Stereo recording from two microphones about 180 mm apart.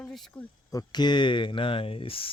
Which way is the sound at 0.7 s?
25° left (ahead or behind).